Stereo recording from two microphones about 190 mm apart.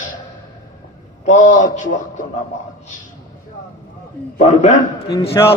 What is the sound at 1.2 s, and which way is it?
Speech, 40° left (ahead or behind).